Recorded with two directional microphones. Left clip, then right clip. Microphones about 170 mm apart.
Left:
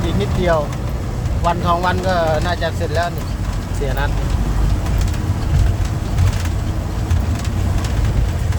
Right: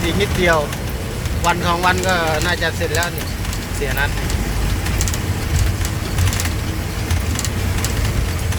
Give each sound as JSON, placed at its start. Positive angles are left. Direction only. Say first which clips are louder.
{"t": 0.2, "sound": "speech", "louder": "right 1 dB", "side_deg": 10}